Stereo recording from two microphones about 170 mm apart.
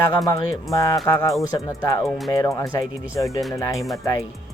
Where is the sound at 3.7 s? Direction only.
Centre (ahead or behind).